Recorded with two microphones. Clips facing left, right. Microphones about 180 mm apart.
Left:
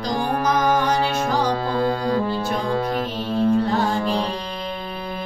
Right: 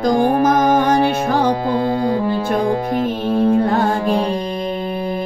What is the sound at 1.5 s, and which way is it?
Music, 20° right (ahead or behind).